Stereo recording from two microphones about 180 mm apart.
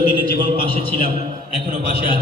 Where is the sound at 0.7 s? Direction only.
30° right (ahead or behind).